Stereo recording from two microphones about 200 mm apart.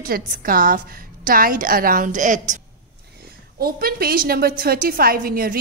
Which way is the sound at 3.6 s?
50° right (ahead or behind).